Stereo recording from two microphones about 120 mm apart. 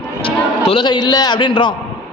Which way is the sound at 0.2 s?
50° left (ahead or behind).